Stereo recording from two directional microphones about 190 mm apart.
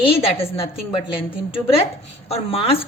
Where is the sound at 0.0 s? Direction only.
30° left (ahead or behind).